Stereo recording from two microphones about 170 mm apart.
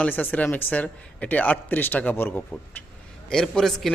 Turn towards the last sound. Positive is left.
turn(degrees=0)  # may be behind; listen again after turning